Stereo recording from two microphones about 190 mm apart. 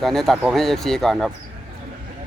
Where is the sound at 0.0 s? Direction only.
Centre (ahead or behind).